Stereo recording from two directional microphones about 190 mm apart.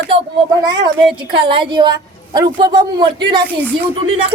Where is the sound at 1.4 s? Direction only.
25° right (ahead or behind).